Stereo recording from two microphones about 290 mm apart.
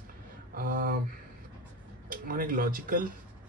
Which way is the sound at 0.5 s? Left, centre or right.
Right.